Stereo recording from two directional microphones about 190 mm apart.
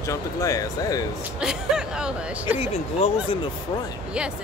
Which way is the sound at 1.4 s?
5° right (ahead or behind).